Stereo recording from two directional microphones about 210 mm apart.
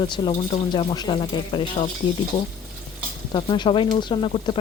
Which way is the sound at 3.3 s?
20° left (ahead or behind).